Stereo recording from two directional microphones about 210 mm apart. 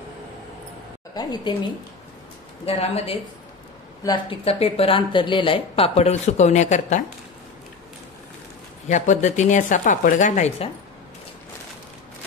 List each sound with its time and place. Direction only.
1.1 s speech: 20° left (ahead or behind)
2.6 s speech: 30° left (ahead or behind)
8.8 s speech: 35° left (ahead or behind)